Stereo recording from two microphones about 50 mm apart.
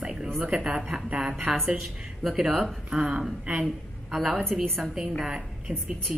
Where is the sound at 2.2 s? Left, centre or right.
Centre.